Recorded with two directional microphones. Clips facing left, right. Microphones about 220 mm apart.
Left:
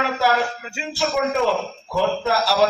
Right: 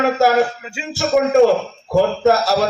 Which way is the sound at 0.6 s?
5° right (ahead or behind).